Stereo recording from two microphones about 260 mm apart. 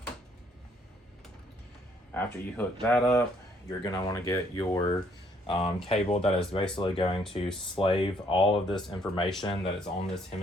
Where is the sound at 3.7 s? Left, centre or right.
Centre.